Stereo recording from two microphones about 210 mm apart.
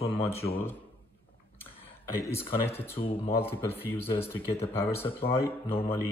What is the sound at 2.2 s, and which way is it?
A man's voice, 10° left (ahead or behind).